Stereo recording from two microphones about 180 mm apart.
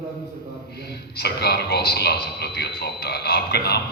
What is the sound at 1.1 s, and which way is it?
A man's voice, 65° left (ahead or behind).